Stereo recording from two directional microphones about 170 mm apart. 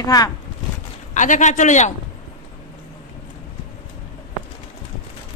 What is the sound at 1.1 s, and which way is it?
Speech, 45° left (ahead or behind).